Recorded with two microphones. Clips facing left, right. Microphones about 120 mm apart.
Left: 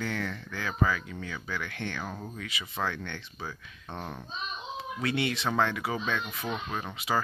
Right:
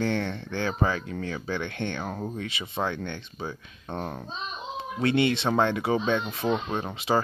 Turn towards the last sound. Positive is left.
turn(degrees=-30)  # may be behind; listen again after turning